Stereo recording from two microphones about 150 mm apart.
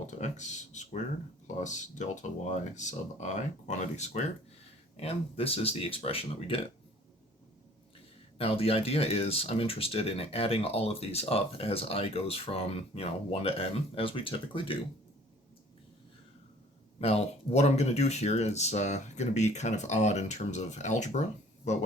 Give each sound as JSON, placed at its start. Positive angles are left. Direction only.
{"t": 0.1, "sound": "speech", "side_deg": 50}
{"t": 8.4, "sound": "speech", "side_deg": 40}
{"t": 17.0, "sound": "speech", "side_deg": 45}